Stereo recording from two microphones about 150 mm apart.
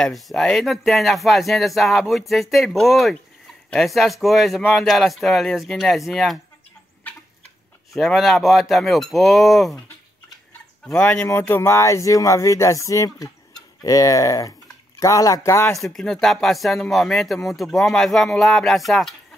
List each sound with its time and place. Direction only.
0.0 s speech: centre (ahead or behind)
7.9 s speech: centre (ahead or behind)
10.9 s speech: 5° left (ahead or behind)
15.8 s speech: centre (ahead or behind)